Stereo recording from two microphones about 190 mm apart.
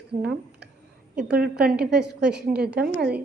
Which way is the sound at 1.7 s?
5° right (ahead or behind).